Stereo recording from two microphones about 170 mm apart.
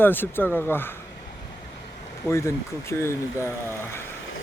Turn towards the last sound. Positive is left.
turn(degrees=15)  # may be behind; listen again after turning